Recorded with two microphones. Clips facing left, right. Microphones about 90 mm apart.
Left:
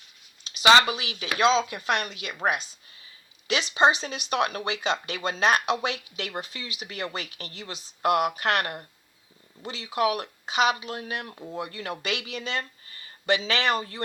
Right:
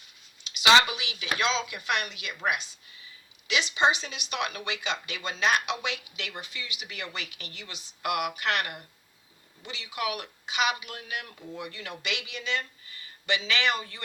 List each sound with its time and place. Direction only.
0.4 s speech: 40° left (ahead or behind)